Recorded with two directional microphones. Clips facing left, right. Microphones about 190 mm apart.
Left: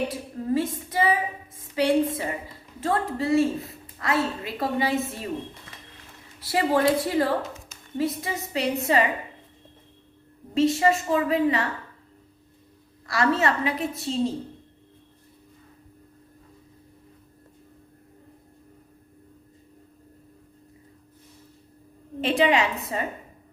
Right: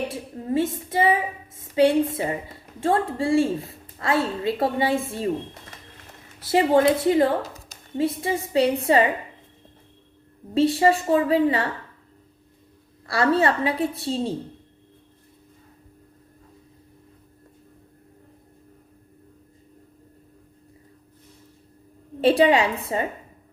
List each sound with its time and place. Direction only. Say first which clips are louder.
0.1 s a woman's voice: even; 25° right (ahead or behind)
6.4 s a woman's voice: right 4 dB; 25° right (ahead or behind)
10.5 s a woman's voice: right 2 dB; 30° right (ahead or behind)
13.1 s a woman's voice: right 3 dB; 30° right (ahead or behind)
22.2 s a woman's voice: right 4 dB; 35° right (ahead or behind)